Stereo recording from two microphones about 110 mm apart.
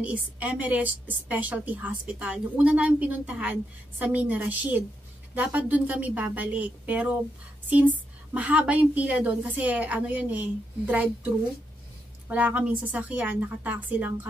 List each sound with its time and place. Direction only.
0.0 s a woman's voice: 15° right (ahead or behind)